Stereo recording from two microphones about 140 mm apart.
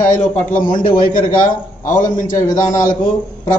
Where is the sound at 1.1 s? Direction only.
75° left (ahead or behind).